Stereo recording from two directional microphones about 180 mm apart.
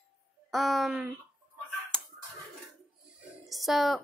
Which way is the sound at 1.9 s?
5° left (ahead or behind).